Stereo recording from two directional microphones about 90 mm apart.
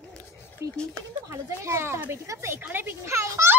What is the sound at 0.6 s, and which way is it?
A child's voice, 35° right (ahead or behind).